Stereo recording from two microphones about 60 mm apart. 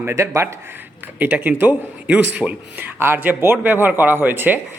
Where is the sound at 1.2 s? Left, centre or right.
Right.